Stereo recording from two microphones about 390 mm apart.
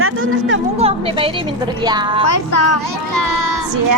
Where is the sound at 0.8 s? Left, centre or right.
Centre.